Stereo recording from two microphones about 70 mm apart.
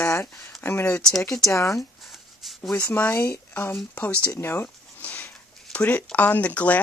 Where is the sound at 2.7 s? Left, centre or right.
Left.